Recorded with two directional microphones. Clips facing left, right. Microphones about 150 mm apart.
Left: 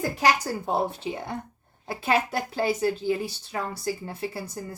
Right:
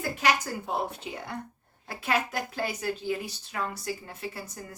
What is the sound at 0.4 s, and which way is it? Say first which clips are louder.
Speech: left 5 dB; 35° left (ahead or behind).